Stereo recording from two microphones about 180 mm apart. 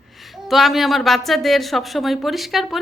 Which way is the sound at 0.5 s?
Centre (ahead or behind).